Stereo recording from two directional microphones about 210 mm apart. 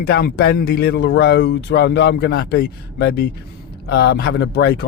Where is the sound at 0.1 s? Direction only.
50° left (ahead or behind).